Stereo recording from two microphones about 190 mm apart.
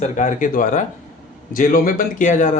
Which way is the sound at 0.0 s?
40° left (ahead or behind).